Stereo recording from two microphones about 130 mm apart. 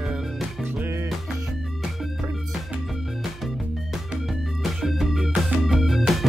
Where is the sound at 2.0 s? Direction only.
5° right (ahead or behind).